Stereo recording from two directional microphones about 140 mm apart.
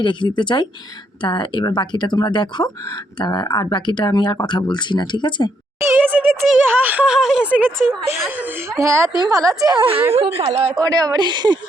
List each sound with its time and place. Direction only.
0.0 s speech: 35° left (ahead or behind)
6.0 s a sound: 10° right (ahead or behind)
6.7 s speech: 10° right (ahead or behind)
8.8 s a woman's voice: 20° right (ahead or behind); by 10.8 s 45° right (ahead or behind)
10.8 s a woman's voice: 25° right (ahead or behind)